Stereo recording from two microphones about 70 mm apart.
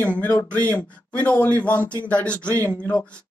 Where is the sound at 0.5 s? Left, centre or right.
Left.